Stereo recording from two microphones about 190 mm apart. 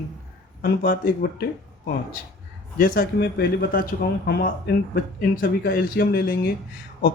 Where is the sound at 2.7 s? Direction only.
45° left (ahead or behind).